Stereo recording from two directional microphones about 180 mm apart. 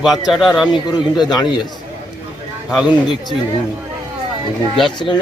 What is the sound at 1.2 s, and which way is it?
Speech, 25° left (ahead or behind).